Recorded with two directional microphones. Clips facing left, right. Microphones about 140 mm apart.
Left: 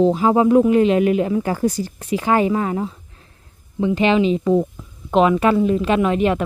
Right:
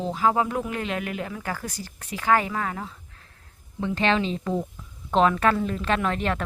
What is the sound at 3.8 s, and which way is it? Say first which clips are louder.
Speech: left 8 dB; 10° left (ahead or behind).